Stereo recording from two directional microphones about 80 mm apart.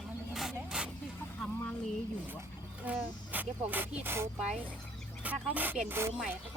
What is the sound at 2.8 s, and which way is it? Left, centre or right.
Speech, right.